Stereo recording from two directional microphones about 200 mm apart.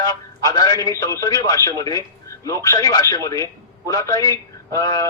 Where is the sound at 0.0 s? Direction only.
15° left (ahead or behind).